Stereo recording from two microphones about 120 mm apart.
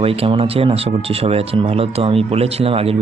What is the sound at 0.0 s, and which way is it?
Speech, 50° right (ahead or behind).